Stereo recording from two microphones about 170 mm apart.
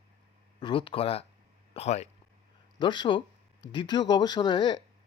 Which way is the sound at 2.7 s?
25° left (ahead or behind).